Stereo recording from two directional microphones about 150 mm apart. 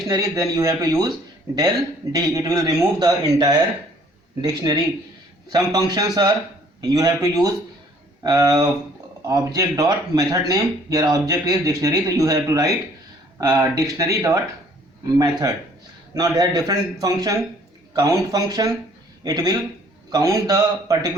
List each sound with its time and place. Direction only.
0.1 s speech: 25° right (ahead or behind)